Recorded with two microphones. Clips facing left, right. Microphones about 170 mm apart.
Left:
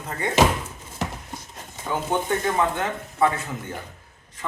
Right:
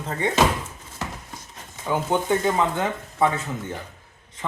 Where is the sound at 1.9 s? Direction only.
15° right (ahead or behind).